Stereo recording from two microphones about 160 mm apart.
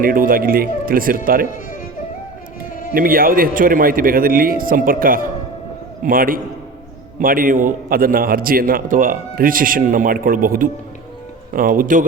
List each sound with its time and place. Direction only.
0.0 s a man's voice: 60° right (ahead or behind)
2.9 s a man's voice: 65° right (ahead or behind)